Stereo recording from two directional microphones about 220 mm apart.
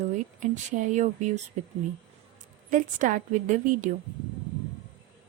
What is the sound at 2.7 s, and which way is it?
Speech, 35° right (ahead or behind).